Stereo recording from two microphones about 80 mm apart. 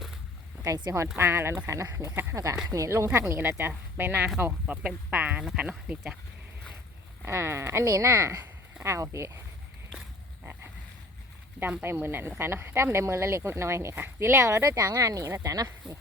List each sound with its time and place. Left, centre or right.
0.6 s speech: right
1.1 s speech: right
4.6 s speech: centre
7.3 s speech: right
10.4 s frog: right
11.8 s speech: right